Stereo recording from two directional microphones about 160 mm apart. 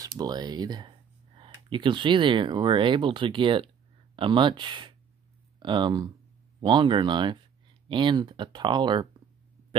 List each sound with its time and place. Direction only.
0.0 s speech: 25° right (ahead or behind)